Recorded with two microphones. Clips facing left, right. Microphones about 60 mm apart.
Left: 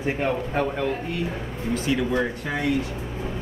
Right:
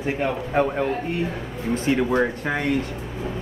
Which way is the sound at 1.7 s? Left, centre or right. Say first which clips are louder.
Right 3 dB; right.